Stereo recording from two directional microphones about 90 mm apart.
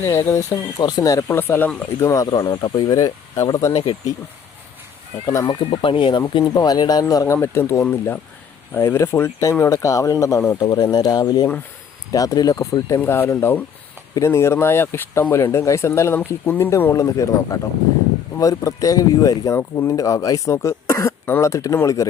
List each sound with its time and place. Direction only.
0.0 s speech: 30° left (ahead or behind)
0.8 s speech: 50° left (ahead or behind)
1.3 s speech: 25° left (ahead or behind)
2.0 s speech: 40° left (ahead or behind)
5.5 s speech: 65° left (ahead or behind)
6.5 s speech: 50° left (ahead or behind)
7.4 s speech: 30° left (ahead or behind)
13.0 s speech: 25° left (ahead or behind)